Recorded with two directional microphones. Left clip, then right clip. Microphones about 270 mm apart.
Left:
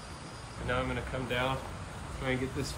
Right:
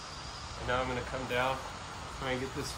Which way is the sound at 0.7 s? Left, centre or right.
Centre.